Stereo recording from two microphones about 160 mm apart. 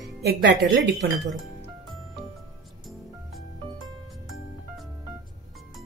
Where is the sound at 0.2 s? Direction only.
90° right.